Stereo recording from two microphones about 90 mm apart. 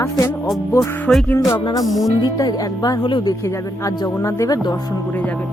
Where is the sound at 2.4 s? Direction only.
45° left (ahead or behind).